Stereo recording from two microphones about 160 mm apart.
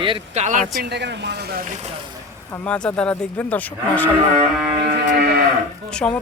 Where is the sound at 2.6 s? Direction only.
5° left (ahead or behind).